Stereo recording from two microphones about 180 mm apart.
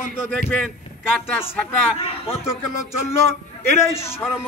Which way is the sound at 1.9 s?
15° left (ahead or behind).